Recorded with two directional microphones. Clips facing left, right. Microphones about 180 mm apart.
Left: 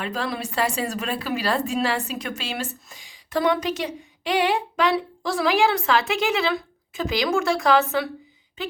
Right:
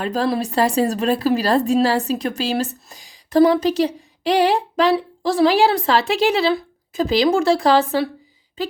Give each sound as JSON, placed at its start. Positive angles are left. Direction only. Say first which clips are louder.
{"t": 0.0, "sound": "speech", "louder": "right 8 dB", "side_deg": -35}